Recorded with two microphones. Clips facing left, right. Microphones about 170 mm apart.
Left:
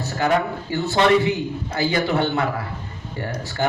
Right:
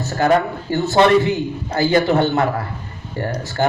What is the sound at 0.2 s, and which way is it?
A man's voice, 45° right (ahead or behind).